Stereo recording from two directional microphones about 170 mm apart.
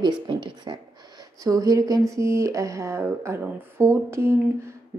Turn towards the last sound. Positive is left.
turn(degrees=-15)  # may be behind; listen again after turning